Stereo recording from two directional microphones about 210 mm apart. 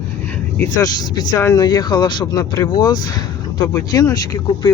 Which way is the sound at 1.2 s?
15° left (ahead or behind).